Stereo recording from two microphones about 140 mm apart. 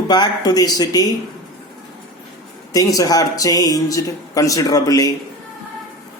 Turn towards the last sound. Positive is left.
turn(degrees=25)  # may be behind; listen again after turning